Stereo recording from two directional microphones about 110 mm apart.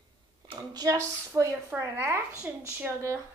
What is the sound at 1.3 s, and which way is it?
Speech, 25° right (ahead or behind).